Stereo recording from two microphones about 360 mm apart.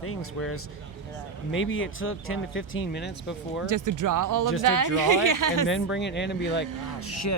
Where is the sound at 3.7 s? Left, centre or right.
Right.